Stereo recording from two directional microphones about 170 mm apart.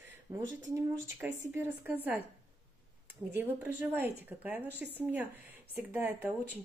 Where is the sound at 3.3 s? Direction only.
10° right (ahead or behind).